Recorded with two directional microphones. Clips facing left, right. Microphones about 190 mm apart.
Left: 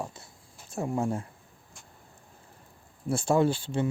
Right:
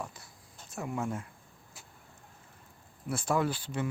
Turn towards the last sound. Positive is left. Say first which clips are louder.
# left 6 dB
turn(degrees=25)  # may be behind; listen again after turning